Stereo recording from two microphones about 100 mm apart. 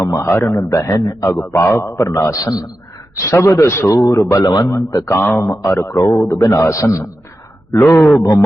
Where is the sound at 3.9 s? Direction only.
40° left (ahead or behind).